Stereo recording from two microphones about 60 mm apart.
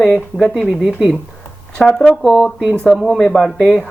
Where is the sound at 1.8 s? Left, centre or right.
Centre.